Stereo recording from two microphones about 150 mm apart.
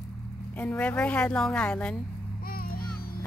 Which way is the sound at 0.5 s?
10° left (ahead or behind).